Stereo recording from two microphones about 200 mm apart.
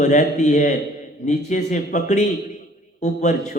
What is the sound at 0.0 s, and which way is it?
A man's voice, 40° left (ahead or behind).